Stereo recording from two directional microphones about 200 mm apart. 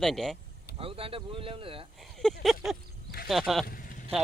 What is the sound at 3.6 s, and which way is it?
Vehicle, 45° left (ahead or behind).